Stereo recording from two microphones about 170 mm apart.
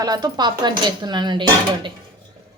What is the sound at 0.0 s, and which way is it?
Speech, 25° right (ahead or behind).